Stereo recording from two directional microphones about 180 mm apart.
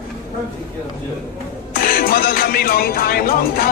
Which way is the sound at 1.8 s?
50° left (ahead or behind).